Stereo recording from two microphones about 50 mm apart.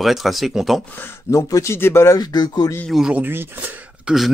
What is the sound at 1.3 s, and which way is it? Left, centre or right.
Speech, left.